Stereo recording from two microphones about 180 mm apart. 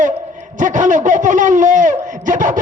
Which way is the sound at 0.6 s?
45° right (ahead or behind).